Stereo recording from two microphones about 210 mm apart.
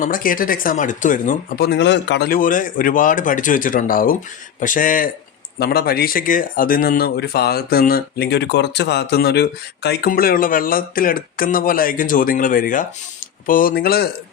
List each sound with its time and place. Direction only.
0.0 s speech: 40° left (ahead or behind)